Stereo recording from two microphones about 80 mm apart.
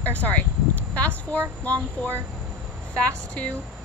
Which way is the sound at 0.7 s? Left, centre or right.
Centre.